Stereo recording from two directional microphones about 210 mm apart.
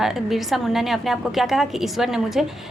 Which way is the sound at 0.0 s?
Centre (ahead or behind).